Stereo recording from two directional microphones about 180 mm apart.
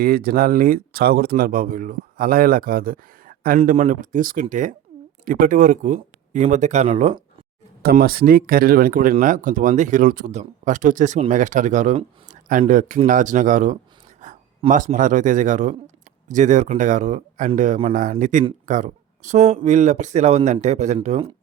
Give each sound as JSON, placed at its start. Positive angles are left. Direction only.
{"t": 0.0, "sound": "speech", "side_deg": -55}
{"t": 7.8, "sound": "speech", "side_deg": -55}
{"t": 14.2, "sound": "a sound", "side_deg": -45}
{"t": 14.9, "sound": "speech", "side_deg": -45}